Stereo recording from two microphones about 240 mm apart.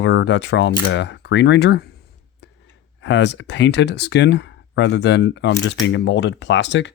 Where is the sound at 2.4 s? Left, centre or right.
Left.